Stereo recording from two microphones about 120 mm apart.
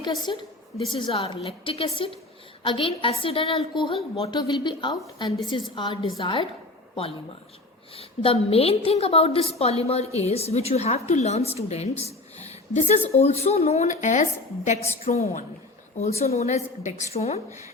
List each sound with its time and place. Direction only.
0.0 s a woman's voice: 35° left (ahead or behind)
7.9 s a woman's voice: 50° left (ahead or behind); by 14.8 s 75° left (ahead or behind)
15.0 s a woman's voice: 60° left (ahead or behind)